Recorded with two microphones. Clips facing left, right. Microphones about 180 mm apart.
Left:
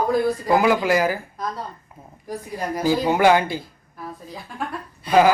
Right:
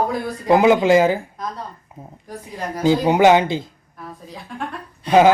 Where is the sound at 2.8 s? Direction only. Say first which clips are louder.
Right 4 dB; 20° right (ahead or behind).